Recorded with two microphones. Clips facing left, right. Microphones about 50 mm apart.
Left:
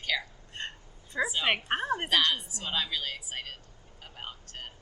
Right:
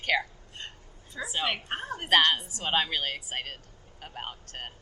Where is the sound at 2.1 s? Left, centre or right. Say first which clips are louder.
Right 7 dB; right.